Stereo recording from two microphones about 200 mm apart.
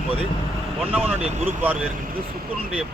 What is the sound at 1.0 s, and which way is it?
Speech, 35° right (ahead or behind).